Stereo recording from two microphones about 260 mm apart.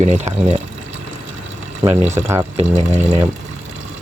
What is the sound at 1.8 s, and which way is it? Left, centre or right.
Speech, centre.